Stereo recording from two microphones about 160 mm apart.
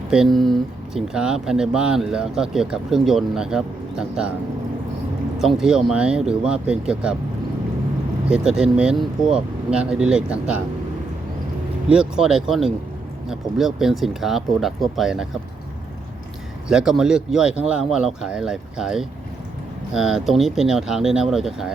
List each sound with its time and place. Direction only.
0.1 s speech: centre (ahead or behind)
5.4 s speech: centre (ahead or behind)
8.3 s speech: 5° right (ahead or behind)
11.9 s speech: 5° right (ahead or behind)
16.6 s speech: 5° right (ahead or behind)